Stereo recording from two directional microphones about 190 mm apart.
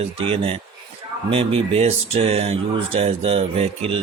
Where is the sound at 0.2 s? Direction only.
30° right (ahead or behind).